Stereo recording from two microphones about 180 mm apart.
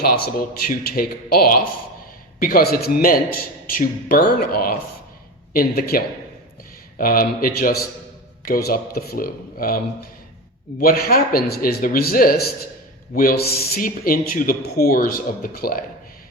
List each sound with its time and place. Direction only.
0.0 s a man's voice: 55° left (ahead or behind)
7.0 s a man's voice: 55° left (ahead or behind)